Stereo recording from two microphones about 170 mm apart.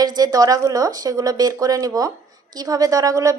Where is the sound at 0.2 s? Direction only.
20° right (ahead or behind).